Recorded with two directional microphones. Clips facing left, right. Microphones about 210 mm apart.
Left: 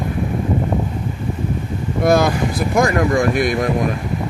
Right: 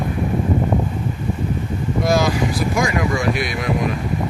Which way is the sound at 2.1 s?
55° left (ahead or behind).